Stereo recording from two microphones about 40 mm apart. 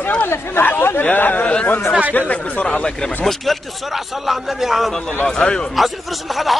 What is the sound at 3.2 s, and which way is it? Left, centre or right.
Speech, centre.